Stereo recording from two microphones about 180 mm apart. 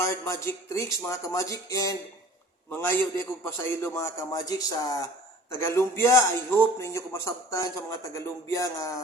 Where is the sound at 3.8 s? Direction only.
15° left (ahead or behind).